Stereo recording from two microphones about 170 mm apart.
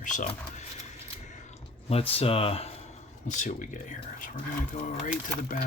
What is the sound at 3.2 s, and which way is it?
Speech, 45° left (ahead or behind).